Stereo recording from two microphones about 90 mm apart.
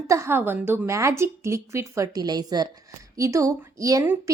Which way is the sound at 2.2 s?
50° right (ahead or behind).